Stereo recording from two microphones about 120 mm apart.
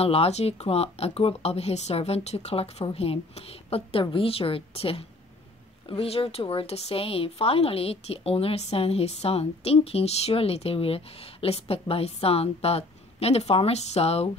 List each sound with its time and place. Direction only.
0.0 s a woman's voice: 55° left (ahead or behind)